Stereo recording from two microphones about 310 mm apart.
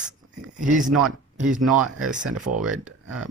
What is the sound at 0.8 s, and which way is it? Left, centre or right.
Speech, centre.